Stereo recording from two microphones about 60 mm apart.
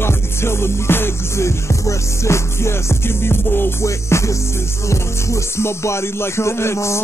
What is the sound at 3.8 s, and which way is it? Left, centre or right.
Music, left.